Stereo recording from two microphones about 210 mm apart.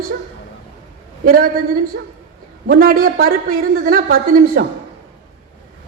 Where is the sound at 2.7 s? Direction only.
45° right (ahead or behind).